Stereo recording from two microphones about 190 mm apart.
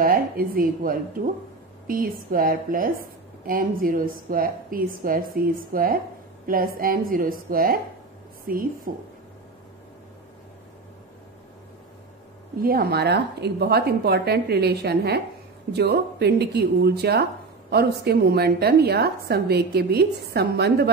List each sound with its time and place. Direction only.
0.0 s a woman's voice: 50° right (ahead or behind)
12.6 s speech: 50° right (ahead or behind)